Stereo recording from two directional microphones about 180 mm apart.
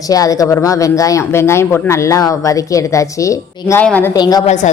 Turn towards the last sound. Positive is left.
turn(degrees=40)  # may be behind; listen again after turning